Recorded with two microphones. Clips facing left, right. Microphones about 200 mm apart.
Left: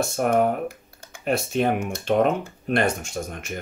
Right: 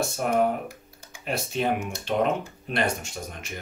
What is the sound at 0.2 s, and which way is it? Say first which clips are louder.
Speech: left 3 dB; 55° left (ahead or behind).